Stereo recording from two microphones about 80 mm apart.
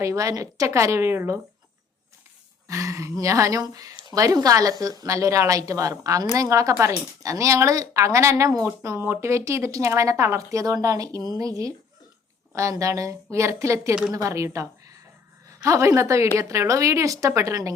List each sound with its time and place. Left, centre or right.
0.0 s speech: right
2.6 s a woman's voice: right